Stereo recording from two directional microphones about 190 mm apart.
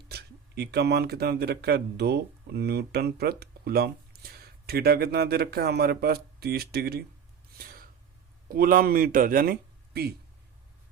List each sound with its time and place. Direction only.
0.1 s speech: 60° right (ahead or behind)
7.6 s gasp: 50° right (ahead or behind)
8.4 s speech: 50° right (ahead or behind)